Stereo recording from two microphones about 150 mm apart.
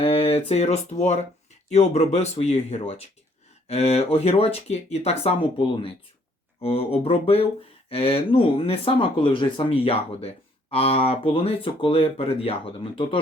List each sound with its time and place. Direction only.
0.0 s speech: 40° left (ahead or behind)